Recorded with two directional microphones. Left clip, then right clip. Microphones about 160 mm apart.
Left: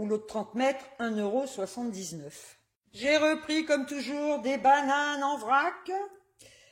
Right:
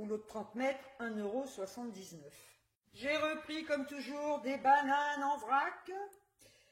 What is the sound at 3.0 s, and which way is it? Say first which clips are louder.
A man's voice: left 10 dB; 50° left (ahead or behind).